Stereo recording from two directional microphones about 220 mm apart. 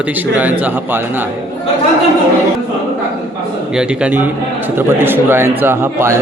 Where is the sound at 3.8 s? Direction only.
5° right (ahead or behind).